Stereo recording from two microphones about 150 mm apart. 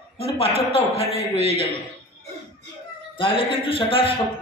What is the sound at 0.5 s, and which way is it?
Speech, 45° right (ahead or behind).